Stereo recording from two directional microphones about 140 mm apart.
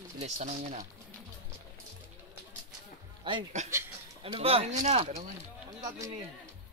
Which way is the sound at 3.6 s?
55° right (ahead or behind).